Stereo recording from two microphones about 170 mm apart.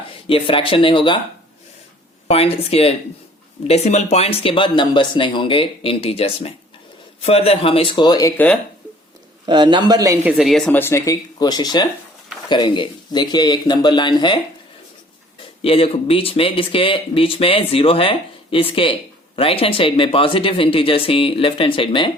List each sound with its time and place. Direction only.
0.3 s speech: 30° left (ahead or behind)
2.3 s speech: 35° left (ahead or behind)
9.5 s a man's voice: 25° right (ahead or behind)
10.2 s speech: centre (ahead or behind)
10.8 s speech: 15° left (ahead or behind)
15.6 s speech: 35° left (ahead or behind)